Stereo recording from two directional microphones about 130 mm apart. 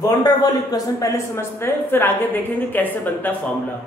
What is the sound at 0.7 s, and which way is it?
A woman's voice, 25° left (ahead or behind).